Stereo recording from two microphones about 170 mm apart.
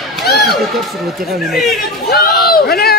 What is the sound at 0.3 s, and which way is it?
Speech, centre (ahead or behind).